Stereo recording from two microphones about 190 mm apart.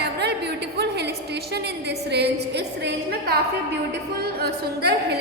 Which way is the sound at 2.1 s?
60° right (ahead or behind).